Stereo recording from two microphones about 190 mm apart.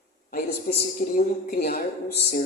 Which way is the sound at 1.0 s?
50° left (ahead or behind).